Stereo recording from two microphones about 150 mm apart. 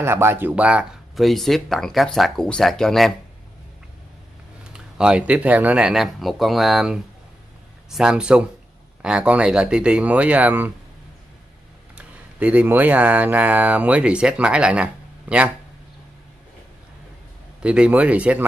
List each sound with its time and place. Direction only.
0.0 s speech: 15° right (ahead or behind); by 3.1 s 5° left (ahead or behind)
4.7 s speech: 5° right (ahead or behind)
11.9 s speech: 10° right (ahead or behind)
17.6 s speech: 10° right (ahead or behind)